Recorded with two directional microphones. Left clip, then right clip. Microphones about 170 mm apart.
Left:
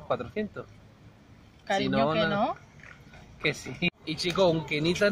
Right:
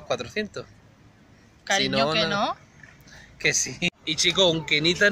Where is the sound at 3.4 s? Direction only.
10° right (ahead or behind).